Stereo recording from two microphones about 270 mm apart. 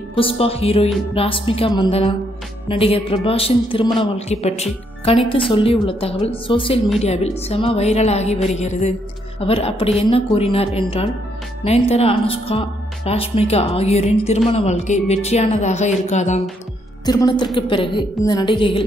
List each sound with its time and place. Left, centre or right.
0.1 s a woman's voice: centre
17.0 s a woman's voice: centre